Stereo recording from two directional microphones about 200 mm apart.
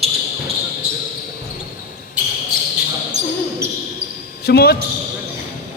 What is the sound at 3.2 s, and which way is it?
Basketball bounce, 35° right (ahead or behind).